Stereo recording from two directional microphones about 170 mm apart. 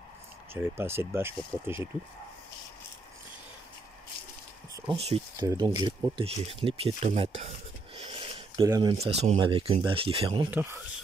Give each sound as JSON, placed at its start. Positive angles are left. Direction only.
{"t": 0.5, "sound": "speech", "side_deg": -15}
{"t": 4.9, "sound": "speech", "side_deg": -35}
{"t": 5.5, "sound": "speech", "side_deg": -25}
{"t": 7.1, "sound": "a sound", "side_deg": -40}
{"t": 8.6, "sound": "speech", "side_deg": -20}
{"t": 8.9, "sound": "speech", "side_deg": -40}
{"t": 10.5, "sound": "speech", "side_deg": -15}